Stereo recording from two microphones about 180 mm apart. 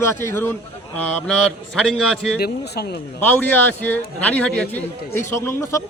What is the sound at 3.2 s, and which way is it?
Speech, 10° left (ahead or behind).